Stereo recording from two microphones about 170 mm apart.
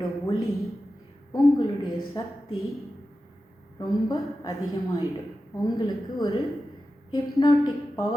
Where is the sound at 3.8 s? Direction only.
25° left (ahead or behind).